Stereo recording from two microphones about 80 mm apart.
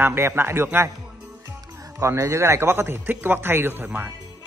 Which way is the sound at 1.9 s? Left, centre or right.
Right.